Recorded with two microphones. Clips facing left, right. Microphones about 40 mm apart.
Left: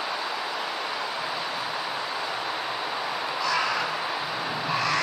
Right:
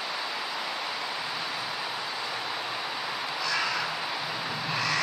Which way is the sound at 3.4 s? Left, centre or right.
Centre.